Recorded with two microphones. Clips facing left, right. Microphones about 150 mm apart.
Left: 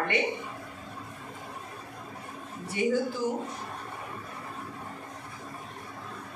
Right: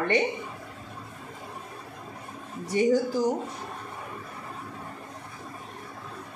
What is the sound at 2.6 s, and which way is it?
Speech, 40° right (ahead or behind).